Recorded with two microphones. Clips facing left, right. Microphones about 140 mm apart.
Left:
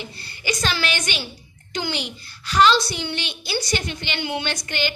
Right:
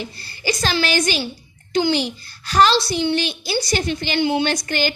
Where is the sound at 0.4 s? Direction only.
35° right (ahead or behind).